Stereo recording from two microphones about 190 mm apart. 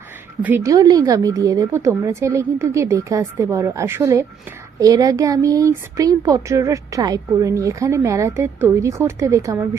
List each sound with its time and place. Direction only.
0.4 s speech: 15° right (ahead or behind)